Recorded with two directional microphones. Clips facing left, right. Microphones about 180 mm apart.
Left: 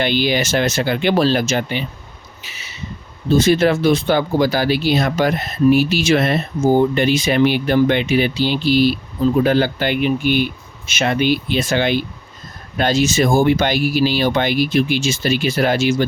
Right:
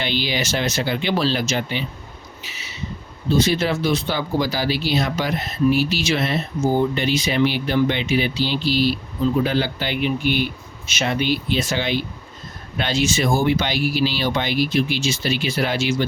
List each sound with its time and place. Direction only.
0.0 s speech: 50° left (ahead or behind)
3.3 s speech: 50° left (ahead or behind)
12.7 s speech: 45° left (ahead or behind)